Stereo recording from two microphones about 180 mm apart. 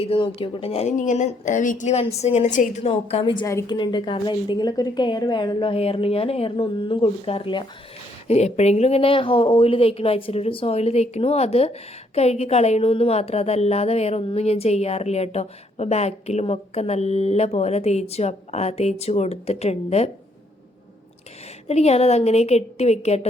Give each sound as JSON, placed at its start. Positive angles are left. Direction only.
{"t": 0.0, "sound": "speech", "side_deg": 30}
{"t": 2.9, "sound": "a woman's voice", "side_deg": 30}
{"t": 21.7, "sound": "speech", "side_deg": 35}